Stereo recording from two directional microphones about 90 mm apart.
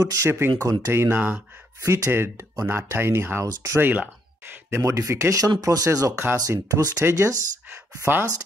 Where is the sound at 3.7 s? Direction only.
20° right (ahead or behind).